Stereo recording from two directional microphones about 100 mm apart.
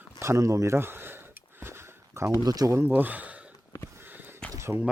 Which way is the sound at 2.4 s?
40° right (ahead or behind).